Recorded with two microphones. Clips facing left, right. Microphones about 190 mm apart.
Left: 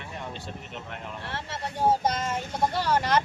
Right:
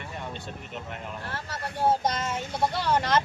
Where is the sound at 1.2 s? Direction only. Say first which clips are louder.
Left 1 dB; 25° left (ahead or behind).